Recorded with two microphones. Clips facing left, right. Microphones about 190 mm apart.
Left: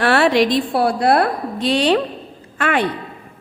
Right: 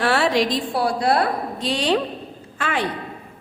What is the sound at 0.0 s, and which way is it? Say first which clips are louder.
A woman's voice: left 4 dB; 65° left (ahead or behind).